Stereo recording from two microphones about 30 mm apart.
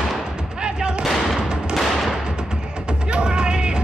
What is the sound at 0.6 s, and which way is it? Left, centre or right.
Artillery fire, right.